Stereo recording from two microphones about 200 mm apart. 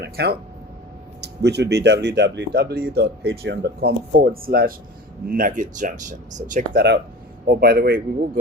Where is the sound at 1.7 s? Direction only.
60° right (ahead or behind).